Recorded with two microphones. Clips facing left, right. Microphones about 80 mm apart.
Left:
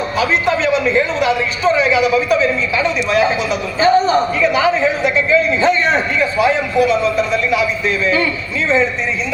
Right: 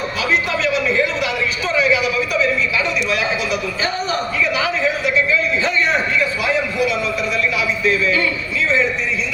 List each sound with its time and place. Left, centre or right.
0.2 s a man's voice: left